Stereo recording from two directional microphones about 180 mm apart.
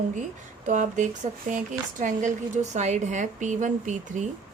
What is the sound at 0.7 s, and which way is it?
A woman's voice, 45° right (ahead or behind).